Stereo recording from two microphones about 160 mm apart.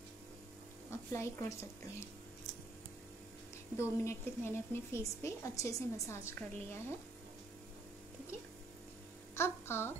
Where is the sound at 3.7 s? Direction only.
15° left (ahead or behind).